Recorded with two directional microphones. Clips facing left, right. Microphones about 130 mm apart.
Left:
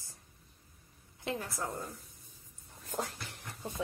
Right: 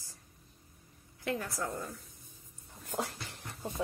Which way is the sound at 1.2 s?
20° left (ahead or behind).